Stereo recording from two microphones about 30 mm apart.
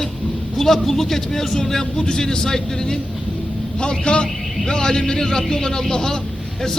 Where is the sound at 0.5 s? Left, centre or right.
Centre.